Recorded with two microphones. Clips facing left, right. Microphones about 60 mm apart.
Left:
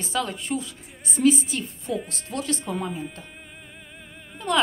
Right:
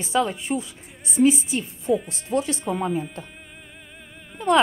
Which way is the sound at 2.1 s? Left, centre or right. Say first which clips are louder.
Right 5 dB; right.